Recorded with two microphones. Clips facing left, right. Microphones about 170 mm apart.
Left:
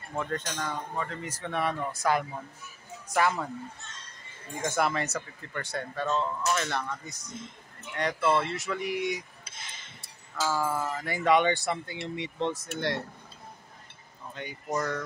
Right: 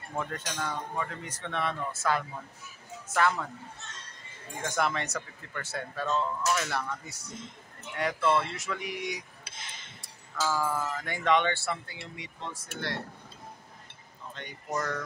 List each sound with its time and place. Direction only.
0.1 s speech: 5° right (ahead or behind)
1.2 s speech: 10° left (ahead or behind)
4.6 s speech: 5° left (ahead or behind)
10.0 s music: 5° left (ahead or behind)
11.0 s speech: 5° left (ahead or behind); by 12.9 s 25° left (ahead or behind)
14.3 s speech: 10° left (ahead or behind)